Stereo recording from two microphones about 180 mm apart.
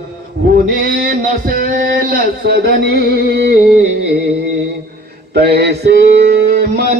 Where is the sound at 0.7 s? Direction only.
55° right (ahead or behind).